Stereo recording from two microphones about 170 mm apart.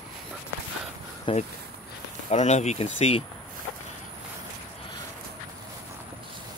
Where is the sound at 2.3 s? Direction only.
40° left (ahead or behind).